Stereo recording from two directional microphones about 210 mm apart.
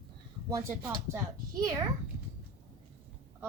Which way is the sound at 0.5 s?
10° right (ahead or behind).